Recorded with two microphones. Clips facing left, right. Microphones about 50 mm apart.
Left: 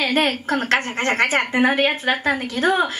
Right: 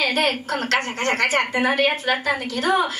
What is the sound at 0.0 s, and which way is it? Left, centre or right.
A woman's voice, left.